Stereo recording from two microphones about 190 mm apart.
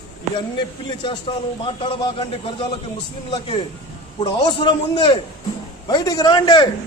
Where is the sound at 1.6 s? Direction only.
30° left (ahead or behind).